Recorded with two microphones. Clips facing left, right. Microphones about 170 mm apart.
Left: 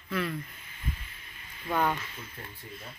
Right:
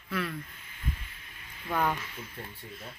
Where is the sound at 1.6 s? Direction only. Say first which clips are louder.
Left 1 dB; centre (ahead or behind).